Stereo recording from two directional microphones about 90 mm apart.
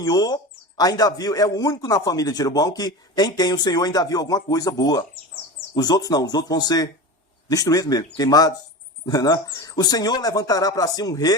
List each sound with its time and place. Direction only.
0.0 s a man's voice: 45° left (ahead or behind)